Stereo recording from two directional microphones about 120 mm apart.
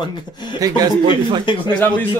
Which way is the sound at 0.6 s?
35° right (ahead or behind).